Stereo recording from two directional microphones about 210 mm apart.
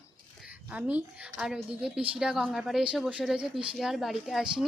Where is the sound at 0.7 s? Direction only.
5° right (ahead or behind).